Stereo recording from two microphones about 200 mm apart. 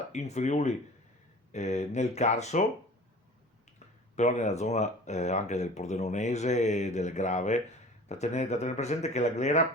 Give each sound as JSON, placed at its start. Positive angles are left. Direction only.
{"t": 0.1, "sound": "speech", "side_deg": 35}
{"t": 4.1, "sound": "speech", "side_deg": 35}